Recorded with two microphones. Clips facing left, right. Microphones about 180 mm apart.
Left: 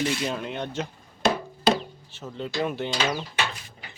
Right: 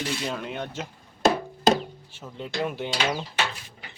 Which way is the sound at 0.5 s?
10° right (ahead or behind).